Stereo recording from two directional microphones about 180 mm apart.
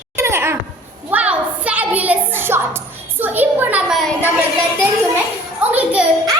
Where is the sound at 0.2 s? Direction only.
15° right (ahead or behind).